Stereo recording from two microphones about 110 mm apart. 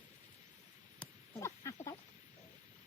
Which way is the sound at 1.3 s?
25° left (ahead or behind).